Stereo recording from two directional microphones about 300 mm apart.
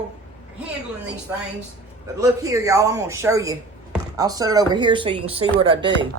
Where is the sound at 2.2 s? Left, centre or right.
Centre.